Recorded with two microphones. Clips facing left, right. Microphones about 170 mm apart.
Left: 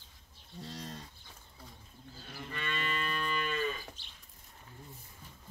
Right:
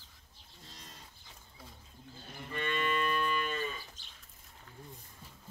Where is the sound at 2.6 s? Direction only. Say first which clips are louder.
Right 5 dB; 50° right (ahead or behind).